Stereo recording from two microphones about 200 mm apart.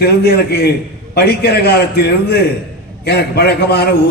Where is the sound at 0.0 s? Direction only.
55° left (ahead or behind).